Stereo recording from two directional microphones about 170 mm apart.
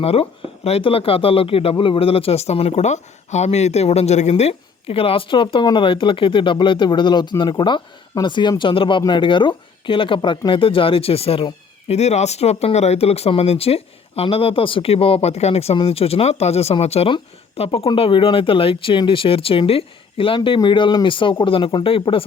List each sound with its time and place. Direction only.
0.0 s speech: 35° left (ahead or behind)